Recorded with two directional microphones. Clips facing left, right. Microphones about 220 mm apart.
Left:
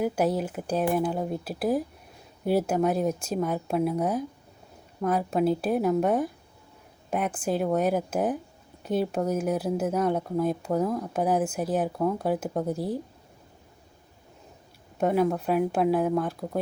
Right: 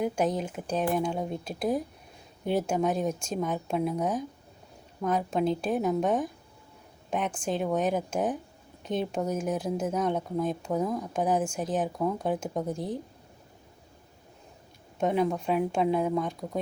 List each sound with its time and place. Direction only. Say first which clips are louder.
0.0 s speech: left 2 dB; 5° left (ahead or behind)
14.9 s speech: left 3 dB; 5° left (ahead or behind)